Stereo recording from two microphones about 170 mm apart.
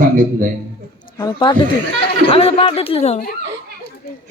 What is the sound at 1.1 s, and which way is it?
Speech, 25° left (ahead or behind).